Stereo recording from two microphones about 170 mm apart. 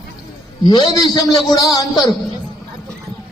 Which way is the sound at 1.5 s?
20° left (ahead or behind).